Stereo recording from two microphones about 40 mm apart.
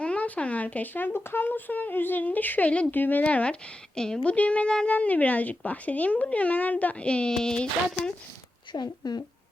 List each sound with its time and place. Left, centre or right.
0.0 s speech: left
3.2 s speech: left
3.9 s speech: centre
4.2 s speech: left